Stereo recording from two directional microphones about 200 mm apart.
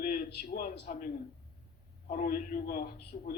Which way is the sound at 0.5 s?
45° left (ahead or behind).